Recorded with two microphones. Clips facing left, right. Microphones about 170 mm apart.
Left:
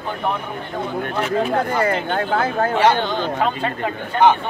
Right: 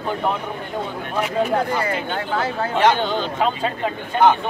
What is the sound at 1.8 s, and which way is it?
Speech, 50° left (ahead or behind).